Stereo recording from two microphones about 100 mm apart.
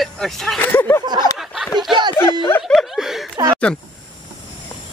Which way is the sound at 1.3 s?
5° right (ahead or behind).